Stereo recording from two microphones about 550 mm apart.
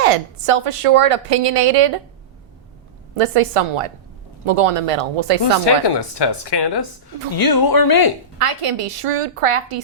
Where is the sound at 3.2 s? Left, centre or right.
Right.